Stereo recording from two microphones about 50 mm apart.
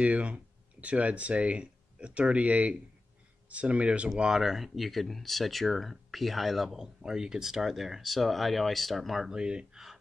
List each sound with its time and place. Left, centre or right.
0.0 s speech: right
4.4 s speech: centre
9.3 s speech: centre